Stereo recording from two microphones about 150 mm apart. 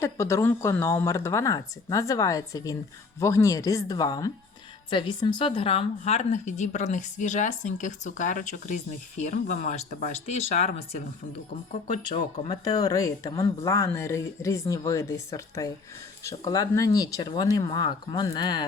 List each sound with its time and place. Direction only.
0.0 s a woman's voice: 20° left (ahead or behind); by 10.7 s 45° left (ahead or behind)
11.7 s a woman's voice: 50° left (ahead or behind)
12.5 s speech: 25° left (ahead or behind)